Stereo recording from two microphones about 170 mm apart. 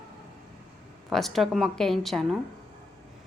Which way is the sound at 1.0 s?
Centre (ahead or behind).